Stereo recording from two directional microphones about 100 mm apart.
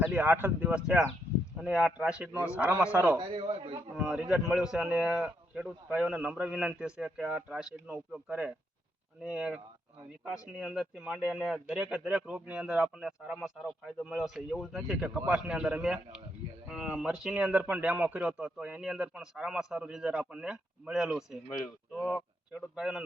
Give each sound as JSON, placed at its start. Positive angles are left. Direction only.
{"t": 0.0, "sound": "a man's voice", "side_deg": -20}
{"t": 3.2, "sound": "a man's voice", "side_deg": -70}
{"t": 4.0, "sound": "speech", "side_deg": -10}